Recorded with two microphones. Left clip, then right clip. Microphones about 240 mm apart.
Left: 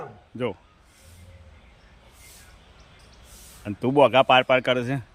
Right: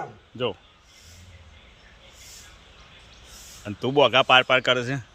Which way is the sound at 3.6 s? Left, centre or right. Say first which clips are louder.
Left 1 dB; centre.